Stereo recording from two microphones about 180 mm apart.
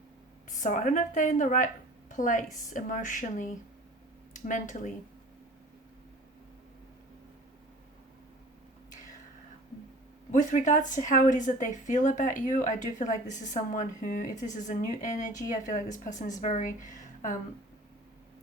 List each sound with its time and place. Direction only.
0.6 s a woman's voice: 45° left (ahead or behind)
10.3 s speech: 45° left (ahead or behind)